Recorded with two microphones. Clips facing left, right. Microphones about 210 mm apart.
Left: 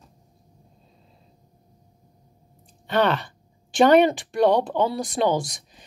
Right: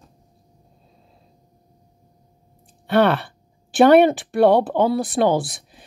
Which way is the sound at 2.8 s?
10° right (ahead or behind).